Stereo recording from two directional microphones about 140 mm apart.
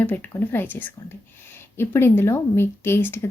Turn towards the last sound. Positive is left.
turn(degrees=15)  # may be behind; listen again after turning